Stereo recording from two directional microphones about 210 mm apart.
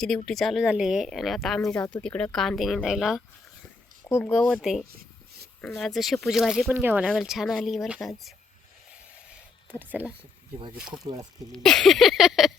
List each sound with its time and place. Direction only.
0.3 s speech: centre (ahead or behind)
4.3 s speech: centre (ahead or behind)
4.9 s a sound: 45° right (ahead or behind)
5.6 s speech: centre (ahead or behind)
9.3 s a sound: 10° right (ahead or behind)
10.9 s speech: 15° right (ahead or behind)
11.5 s speech: 5° left (ahead or behind)